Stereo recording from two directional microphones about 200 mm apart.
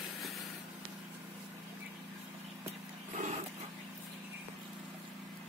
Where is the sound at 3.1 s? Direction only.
40° right (ahead or behind).